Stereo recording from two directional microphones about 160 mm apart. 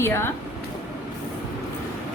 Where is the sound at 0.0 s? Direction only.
15° left (ahead or behind).